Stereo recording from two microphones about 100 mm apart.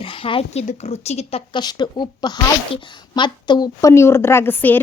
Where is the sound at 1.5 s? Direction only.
50° left (ahead or behind).